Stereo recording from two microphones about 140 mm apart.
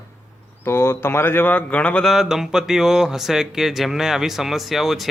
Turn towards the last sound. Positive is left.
turn(degrees=0)  # may be behind; listen again after turning